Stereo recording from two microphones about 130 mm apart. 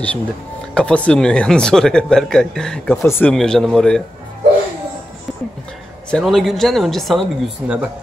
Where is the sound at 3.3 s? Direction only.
5° left (ahead or behind).